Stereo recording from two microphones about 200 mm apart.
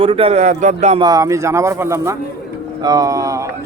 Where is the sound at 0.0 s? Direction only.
30° right (ahead or behind).